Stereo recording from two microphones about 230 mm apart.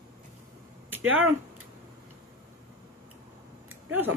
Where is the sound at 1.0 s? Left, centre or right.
Right.